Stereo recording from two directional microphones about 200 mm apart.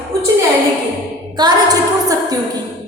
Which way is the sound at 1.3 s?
20° right (ahead or behind).